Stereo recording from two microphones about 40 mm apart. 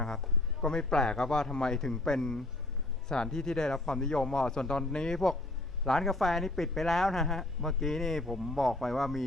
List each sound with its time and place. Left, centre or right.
0.6 s a man's voice: centre